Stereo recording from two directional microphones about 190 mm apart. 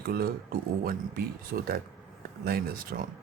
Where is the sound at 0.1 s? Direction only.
55° right (ahead or behind).